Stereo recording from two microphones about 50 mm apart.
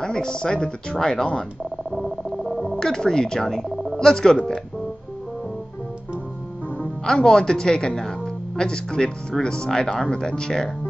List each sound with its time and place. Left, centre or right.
0.0 s speech: centre
1.9 s a sound: centre
2.6 s speech: centre
7.1 s speech: centre